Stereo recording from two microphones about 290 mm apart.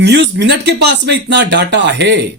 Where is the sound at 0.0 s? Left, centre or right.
Right.